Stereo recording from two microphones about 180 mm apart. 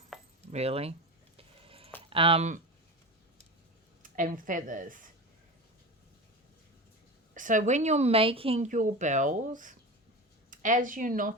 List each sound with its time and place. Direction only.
0.1 s keys jangling: centre (ahead or behind)
0.4 s speech: 35° right (ahead or behind)
1.4 s a sound: 30° right (ahead or behind)
2.0 s speech: 30° right (ahead or behind)
4.0 s speech: 50° right (ahead or behind)
7.3 s speech: 45° right (ahead or behind)